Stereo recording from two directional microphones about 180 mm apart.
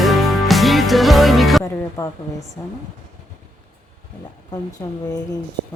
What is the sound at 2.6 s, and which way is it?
Speech, 15° left (ahead or behind).